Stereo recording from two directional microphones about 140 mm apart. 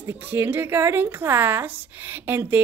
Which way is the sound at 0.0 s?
15° right (ahead or behind).